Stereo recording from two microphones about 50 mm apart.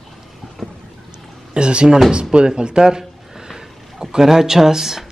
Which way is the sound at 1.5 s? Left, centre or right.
Centre.